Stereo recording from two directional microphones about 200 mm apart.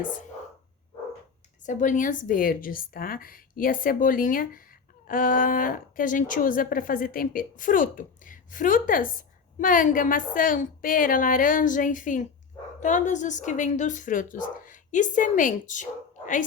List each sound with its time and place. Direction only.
1.6 s a woman's voice: 40° left (ahead or behind)